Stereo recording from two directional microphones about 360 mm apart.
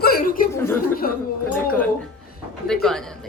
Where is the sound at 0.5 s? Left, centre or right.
Centre.